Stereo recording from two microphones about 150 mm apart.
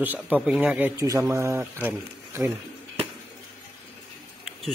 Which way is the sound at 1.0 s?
20° right (ahead or behind).